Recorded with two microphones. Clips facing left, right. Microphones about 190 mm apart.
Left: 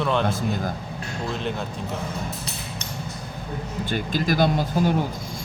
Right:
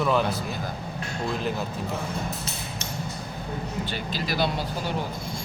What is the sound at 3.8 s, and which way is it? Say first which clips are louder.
Speech: left 6 dB; 50° left (ahead or behind).